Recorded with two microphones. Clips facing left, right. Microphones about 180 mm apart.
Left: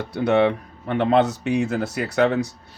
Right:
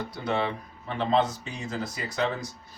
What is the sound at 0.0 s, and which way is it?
Speech, 70° left (ahead or behind).